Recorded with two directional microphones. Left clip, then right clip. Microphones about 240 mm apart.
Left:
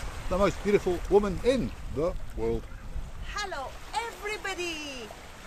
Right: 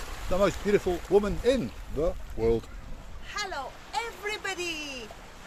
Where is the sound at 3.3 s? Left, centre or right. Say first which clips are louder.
Right 1 dB; centre.